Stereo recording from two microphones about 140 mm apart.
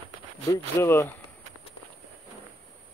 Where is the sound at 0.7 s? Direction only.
15° left (ahead or behind).